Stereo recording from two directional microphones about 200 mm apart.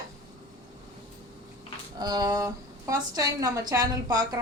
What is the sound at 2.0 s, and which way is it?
A woman's voice, 20° right (ahead or behind).